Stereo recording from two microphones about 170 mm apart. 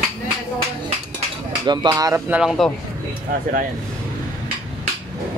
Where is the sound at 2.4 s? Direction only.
Centre (ahead or behind).